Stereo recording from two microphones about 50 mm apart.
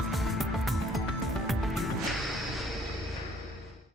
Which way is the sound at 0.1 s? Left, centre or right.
Centre.